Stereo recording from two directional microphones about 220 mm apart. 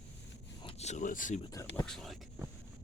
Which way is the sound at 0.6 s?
25° left (ahead or behind).